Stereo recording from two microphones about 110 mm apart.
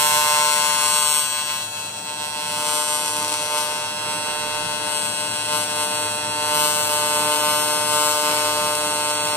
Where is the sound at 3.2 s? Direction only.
15° left (ahead or behind).